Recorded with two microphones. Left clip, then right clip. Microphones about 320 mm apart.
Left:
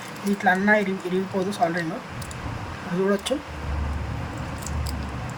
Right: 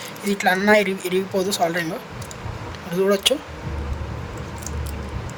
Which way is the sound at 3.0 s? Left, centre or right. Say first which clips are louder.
Right 6 dB; right.